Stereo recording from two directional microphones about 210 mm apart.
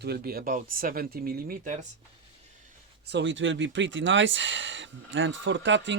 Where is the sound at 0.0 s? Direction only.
50° right (ahead or behind).